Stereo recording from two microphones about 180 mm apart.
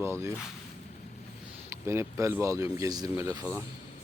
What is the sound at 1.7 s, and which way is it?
Speech, 15° right (ahead or behind).